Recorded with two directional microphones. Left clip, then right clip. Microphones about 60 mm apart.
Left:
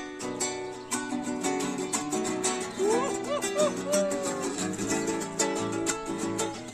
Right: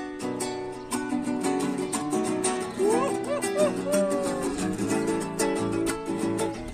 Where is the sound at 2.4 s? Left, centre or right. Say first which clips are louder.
Right 3 dB; centre.